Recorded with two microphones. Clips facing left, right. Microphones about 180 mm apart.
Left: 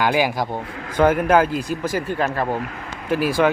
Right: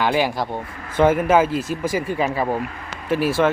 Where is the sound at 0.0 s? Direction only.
5° left (ahead or behind).